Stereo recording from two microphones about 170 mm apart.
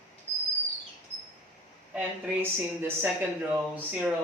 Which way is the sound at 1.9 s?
10° right (ahead or behind).